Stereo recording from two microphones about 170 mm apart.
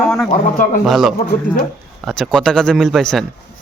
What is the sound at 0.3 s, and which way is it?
Speech, 50° left (ahead or behind).